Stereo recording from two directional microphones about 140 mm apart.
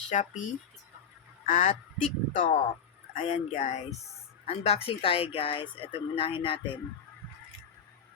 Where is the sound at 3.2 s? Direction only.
55° left (ahead or behind).